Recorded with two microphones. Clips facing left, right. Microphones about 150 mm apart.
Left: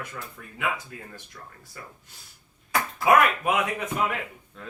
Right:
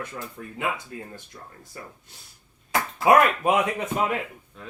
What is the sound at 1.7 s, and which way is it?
Speech, 30° right (ahead or behind).